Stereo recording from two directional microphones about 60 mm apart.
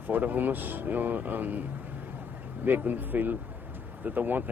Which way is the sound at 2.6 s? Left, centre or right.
Right.